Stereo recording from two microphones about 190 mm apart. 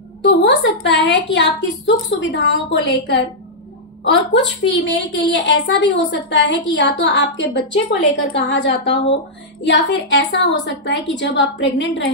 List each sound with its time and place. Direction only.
0.2 s a woman's voice: 70° left (ahead or behind)
4.0 s a woman's voice: 75° left (ahead or behind)